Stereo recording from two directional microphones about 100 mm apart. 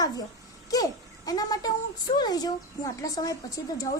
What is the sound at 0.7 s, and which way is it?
Speech, 40° left (ahead or behind).